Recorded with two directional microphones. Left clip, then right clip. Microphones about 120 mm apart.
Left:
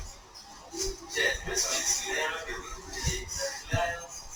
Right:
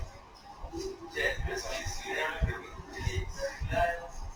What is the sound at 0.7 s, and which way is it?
Music, 30° left (ahead or behind).